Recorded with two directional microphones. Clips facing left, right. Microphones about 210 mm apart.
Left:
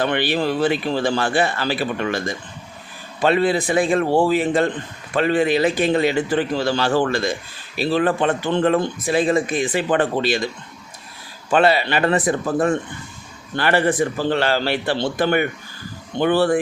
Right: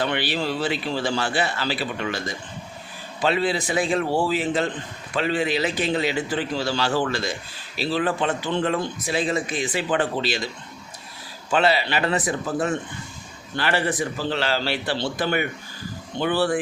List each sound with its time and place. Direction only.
0.0 s speech: 50° left (ahead or behind)
11.5 s speech: 50° left (ahead or behind)